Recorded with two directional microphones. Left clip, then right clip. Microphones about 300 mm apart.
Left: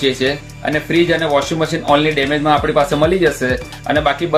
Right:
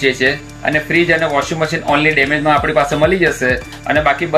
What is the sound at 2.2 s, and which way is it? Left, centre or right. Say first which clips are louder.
Speech: right 2 dB; centre.